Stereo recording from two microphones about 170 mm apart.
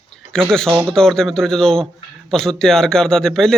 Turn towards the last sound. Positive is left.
turn(degrees=5)  # may be behind; listen again after turning